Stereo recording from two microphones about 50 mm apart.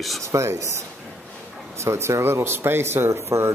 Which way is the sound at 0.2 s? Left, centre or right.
Right.